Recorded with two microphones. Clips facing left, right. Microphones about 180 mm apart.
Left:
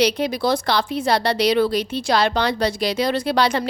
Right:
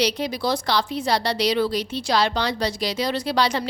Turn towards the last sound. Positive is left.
turn(degrees=55)  # may be behind; listen again after turning